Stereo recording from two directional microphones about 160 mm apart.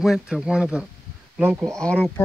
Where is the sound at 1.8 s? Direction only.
10° left (ahead or behind).